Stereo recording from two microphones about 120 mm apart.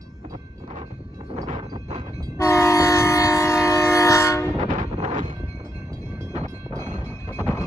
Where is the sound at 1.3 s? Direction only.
75° right (ahead or behind).